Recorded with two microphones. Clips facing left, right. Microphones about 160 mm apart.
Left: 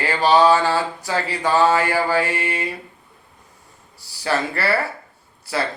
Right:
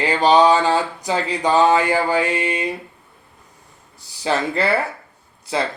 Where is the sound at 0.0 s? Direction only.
20° right (ahead or behind).